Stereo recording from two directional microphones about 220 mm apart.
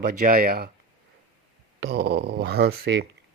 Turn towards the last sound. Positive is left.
turn(degrees=-50)  # may be behind; listen again after turning